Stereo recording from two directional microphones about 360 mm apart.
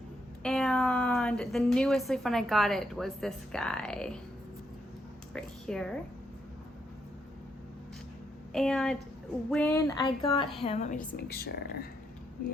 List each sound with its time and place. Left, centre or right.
0.4 s a woman's voice: centre
5.3 s a woman's voice: centre
8.5 s a woman's voice: centre
9.5 s a sound: centre
11.2 s speech: left